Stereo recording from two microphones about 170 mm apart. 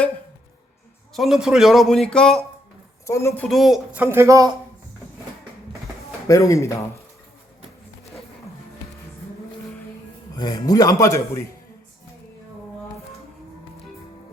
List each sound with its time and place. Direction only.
1.1 s speech: centre (ahead or behind)
3.1 s speech: 15° left (ahead or behind); by 4.0 s centre (ahead or behind)
4.0 s speech: 15° right (ahead or behind)
6.2 s speech: 20° left (ahead or behind)
10.3 s speech: 25° left (ahead or behind)